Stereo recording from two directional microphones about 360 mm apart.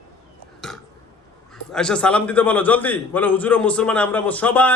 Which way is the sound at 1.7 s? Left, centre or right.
Centre.